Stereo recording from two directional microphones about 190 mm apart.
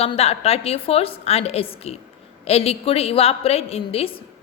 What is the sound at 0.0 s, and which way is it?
A woman's voice, 35° left (ahead or behind).